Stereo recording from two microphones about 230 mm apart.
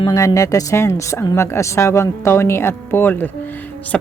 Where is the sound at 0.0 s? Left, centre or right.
Centre.